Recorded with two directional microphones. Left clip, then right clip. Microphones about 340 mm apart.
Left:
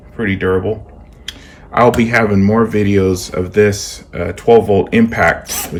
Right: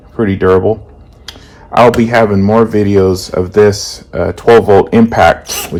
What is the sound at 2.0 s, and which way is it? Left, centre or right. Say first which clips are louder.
Speech: right 4 dB; centre.